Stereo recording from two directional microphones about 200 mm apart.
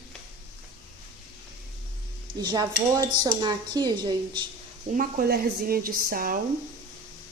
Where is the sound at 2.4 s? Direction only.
20° right (ahead or behind).